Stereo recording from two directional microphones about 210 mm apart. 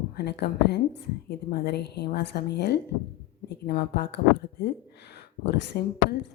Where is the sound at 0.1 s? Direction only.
50° left (ahead or behind).